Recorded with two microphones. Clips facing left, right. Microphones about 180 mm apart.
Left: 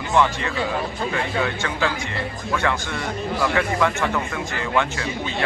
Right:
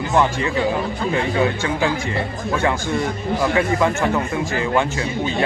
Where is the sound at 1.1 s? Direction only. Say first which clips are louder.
Right 6 dB; 20° right (ahead or behind).